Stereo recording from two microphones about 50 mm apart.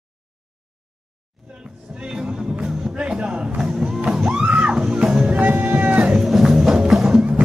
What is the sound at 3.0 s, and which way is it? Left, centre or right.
Music, centre.